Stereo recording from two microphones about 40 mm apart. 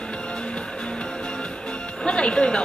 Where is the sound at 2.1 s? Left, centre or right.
Left.